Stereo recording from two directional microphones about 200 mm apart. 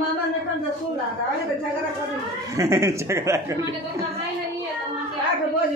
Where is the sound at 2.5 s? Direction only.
15° right (ahead or behind).